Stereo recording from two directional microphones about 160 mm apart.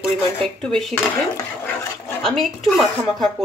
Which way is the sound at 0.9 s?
15° left (ahead or behind).